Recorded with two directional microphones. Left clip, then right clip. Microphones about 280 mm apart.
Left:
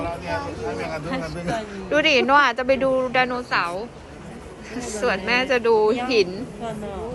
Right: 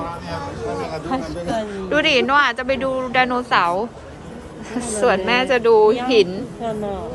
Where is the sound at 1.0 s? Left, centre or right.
Right.